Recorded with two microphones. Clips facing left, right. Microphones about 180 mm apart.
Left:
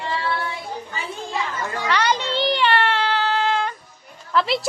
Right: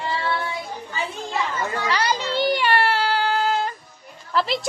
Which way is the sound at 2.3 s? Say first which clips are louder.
Right 2 dB; 10° right (ahead or behind).